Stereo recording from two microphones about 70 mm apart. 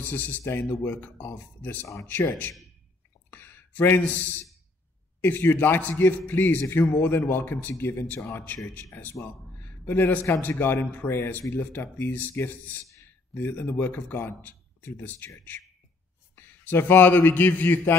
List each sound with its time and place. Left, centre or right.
0.0 s speech: left
9.2 s a sound: left
10.4 s speech: left
16.3 s a man's voice: left